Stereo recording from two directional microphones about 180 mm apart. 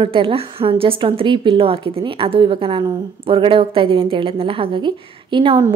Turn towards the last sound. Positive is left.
turn(degrees=-30)  # may be behind; listen again after turning